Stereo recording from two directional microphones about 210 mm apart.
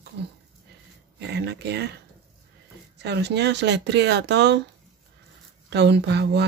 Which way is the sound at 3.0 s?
55° right (ahead or behind).